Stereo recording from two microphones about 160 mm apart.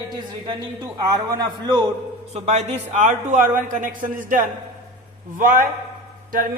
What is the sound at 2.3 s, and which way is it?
A man's voice, 45° right (ahead or behind).